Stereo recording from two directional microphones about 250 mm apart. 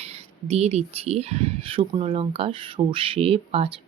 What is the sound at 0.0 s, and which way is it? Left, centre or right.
Speech, right.